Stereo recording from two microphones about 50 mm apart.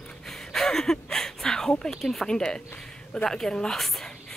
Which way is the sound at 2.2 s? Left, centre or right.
Centre.